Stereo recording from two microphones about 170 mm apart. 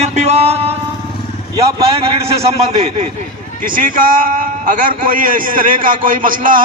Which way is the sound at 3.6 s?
55° right (ahead or behind).